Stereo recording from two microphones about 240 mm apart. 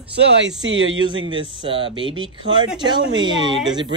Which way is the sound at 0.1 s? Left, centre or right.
Right.